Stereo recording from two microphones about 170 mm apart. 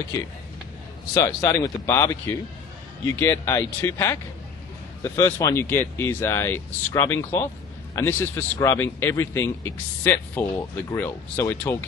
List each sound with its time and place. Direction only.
1.1 s a man's voice: 20° left (ahead or behind)